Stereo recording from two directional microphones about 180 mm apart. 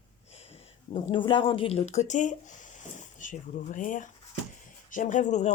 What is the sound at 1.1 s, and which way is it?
Speech, 25° left (ahead or behind).